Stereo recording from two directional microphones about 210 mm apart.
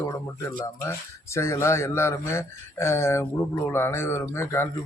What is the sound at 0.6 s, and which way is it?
Speech, 15° left (ahead or behind).